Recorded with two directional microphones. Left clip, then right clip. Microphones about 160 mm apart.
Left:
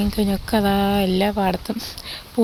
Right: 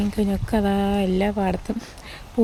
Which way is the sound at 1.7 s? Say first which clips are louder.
Left 5 dB; 15° right (ahead or behind).